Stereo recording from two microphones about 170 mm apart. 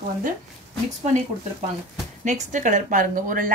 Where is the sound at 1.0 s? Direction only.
40° right (ahead or behind).